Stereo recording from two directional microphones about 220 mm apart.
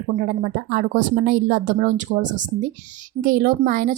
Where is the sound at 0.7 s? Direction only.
40° right (ahead or behind).